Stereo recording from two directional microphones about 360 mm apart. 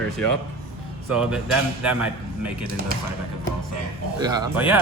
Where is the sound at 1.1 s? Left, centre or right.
Centre.